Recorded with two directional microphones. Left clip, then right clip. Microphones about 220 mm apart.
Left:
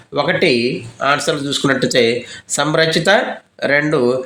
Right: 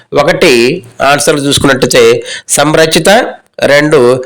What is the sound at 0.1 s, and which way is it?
Speech, 45° right (ahead or behind).